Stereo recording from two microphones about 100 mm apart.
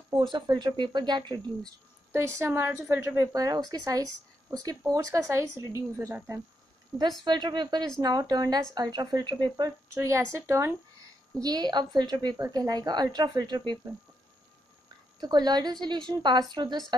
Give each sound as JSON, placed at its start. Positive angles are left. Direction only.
{"t": 0.1, "sound": "speech", "side_deg": -45}
{"t": 2.1, "sound": "a woman's voice", "side_deg": -25}
{"t": 7.0, "sound": "speech", "side_deg": -45}
{"t": 9.9, "sound": "a woman's voice", "side_deg": -30}
{"t": 11.4, "sound": "speech", "side_deg": -45}
{"t": 15.1, "sound": "speech", "side_deg": -45}